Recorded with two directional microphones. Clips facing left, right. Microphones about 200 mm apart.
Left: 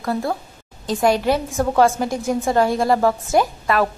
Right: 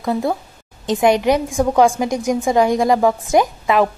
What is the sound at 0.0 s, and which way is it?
A woman's voice, 20° right (ahead or behind).